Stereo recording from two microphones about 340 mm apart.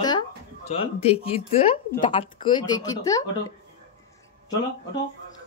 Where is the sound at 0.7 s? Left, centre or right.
Centre.